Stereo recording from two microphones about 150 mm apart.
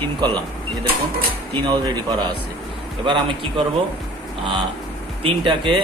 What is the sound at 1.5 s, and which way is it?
Speech, 30° right (ahead or behind).